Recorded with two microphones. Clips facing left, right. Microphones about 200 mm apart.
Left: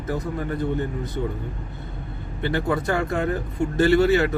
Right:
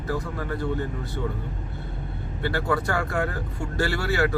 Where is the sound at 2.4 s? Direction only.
20° left (ahead or behind).